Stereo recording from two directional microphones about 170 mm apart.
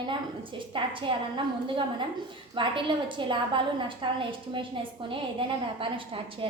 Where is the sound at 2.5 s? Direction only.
30° right (ahead or behind).